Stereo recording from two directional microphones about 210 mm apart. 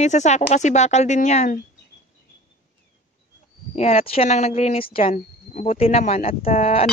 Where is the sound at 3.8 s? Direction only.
30° left (ahead or behind).